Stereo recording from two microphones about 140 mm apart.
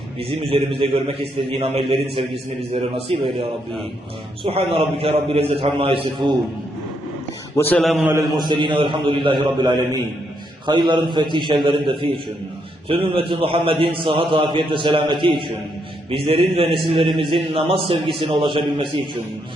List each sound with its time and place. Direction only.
0.3 s a man's voice: 40° right (ahead or behind)
4.4 s a man's voice: 45° right (ahead or behind)
7.5 s a man's voice: 15° left (ahead or behind)
7.8 s a man's voice: centre (ahead or behind)
8.4 s a man's voice: 35° right (ahead or behind)